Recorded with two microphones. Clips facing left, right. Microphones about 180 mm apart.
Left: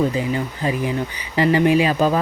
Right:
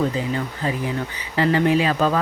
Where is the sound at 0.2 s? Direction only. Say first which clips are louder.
Left 2 dB; 15° left (ahead or behind).